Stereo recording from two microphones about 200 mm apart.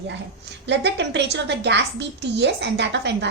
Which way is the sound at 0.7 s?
60° right (ahead or behind).